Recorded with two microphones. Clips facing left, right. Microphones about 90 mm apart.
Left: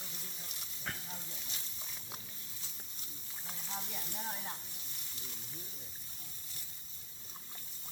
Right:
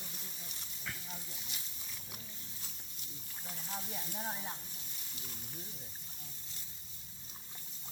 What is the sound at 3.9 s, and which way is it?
Speech, 15° right (ahead or behind).